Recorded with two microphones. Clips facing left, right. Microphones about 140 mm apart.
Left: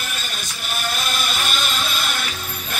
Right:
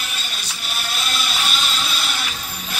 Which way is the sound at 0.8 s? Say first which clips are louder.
Left 2 dB; 45° left (ahead or behind).